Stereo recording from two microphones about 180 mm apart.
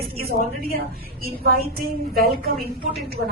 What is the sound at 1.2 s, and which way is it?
A woman's voice, 55° right (ahead or behind).